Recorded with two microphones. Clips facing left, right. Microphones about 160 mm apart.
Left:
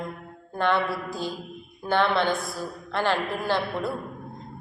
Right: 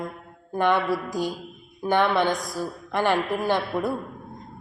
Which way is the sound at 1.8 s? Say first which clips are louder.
Right 2 dB; 15° right (ahead or behind).